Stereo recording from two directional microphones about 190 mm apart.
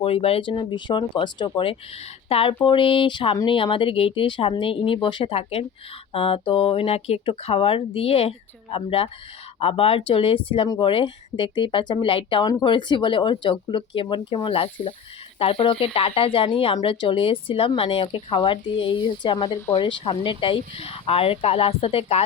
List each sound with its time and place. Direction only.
0.0 s a woman's voice: 30° left (ahead or behind)